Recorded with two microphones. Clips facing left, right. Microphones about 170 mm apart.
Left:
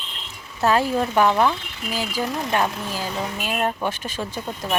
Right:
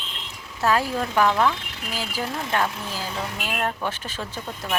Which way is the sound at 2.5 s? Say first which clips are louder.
Left 1 dB; 15° left (ahead or behind).